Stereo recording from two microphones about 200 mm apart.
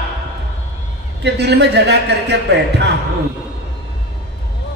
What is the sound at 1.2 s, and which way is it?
A man's voice, 55° right (ahead or behind).